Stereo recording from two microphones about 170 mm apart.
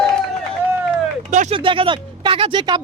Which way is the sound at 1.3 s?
45° right (ahead or behind).